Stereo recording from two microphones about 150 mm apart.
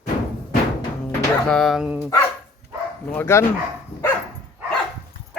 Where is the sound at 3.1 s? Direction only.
15° left (ahead or behind).